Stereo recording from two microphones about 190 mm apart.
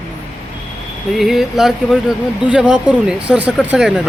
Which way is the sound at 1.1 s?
Centre (ahead or behind).